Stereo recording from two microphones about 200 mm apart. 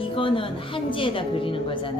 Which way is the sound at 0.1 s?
25° left (ahead or behind).